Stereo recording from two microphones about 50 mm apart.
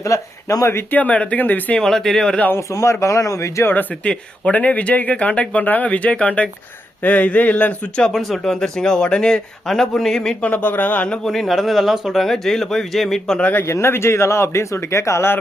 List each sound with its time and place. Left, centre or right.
0.0 s speech: left
0.9 s speech: left
1.8 s a man's voice: centre
2.6 s speech: left
4.0 s speech: left
8.1 s a man's voice: centre
10.4 s speech: left
11.3 s speech: centre
13.4 s speech: left
13.7 s speech: left